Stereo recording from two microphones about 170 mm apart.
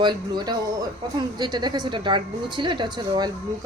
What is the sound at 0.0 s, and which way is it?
A woman's voice, 25° right (ahead or behind).